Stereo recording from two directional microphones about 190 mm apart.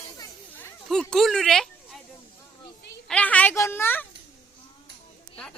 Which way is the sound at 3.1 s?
5° left (ahead or behind).